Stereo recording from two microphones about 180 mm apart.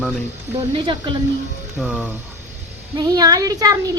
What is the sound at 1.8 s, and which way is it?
Speech, 5° right (ahead or behind).